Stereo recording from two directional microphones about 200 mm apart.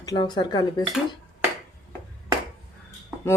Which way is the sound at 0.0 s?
20° left (ahead or behind).